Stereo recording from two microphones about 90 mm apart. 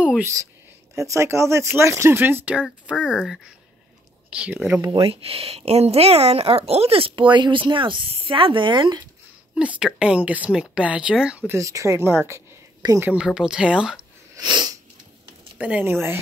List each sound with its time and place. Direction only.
0.2 s speech: 35° right (ahead or behind); by 4.8 s 20° right (ahead or behind)
4.8 s speech: 40° right (ahead or behind)
5.1 s speech: 90° right; by 9.0 s 60° right (ahead or behind)
9.6 s speech: 15° right (ahead or behind)
11.4 s speech: 35° right (ahead or behind)
13.0 s speech: 10° right (ahead or behind)
14.3 s sniff: 50° right (ahead or behind)
15.5 s a woman's voice: 15° right (ahead or behind)